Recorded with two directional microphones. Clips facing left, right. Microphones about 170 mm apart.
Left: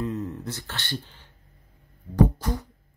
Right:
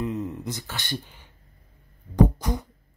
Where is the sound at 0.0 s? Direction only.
15° right (ahead or behind).